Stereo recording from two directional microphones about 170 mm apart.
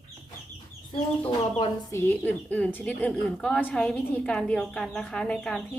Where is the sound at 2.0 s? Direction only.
10° left (ahead or behind).